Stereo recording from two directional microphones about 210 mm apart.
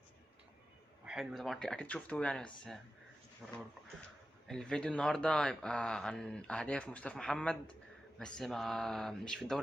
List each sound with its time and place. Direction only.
1.0 s speech: centre (ahead or behind)